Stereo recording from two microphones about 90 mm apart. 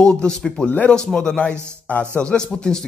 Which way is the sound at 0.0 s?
10° left (ahead or behind).